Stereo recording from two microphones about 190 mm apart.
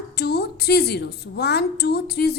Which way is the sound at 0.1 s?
55° left (ahead or behind).